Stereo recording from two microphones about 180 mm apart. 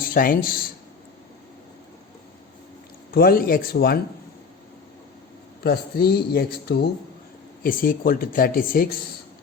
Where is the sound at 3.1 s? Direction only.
55° left (ahead or behind).